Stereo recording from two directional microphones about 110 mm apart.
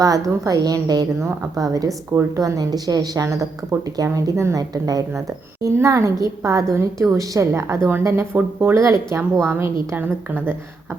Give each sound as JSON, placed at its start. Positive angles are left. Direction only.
{"t": 0.0, "sound": "speech", "side_deg": -30}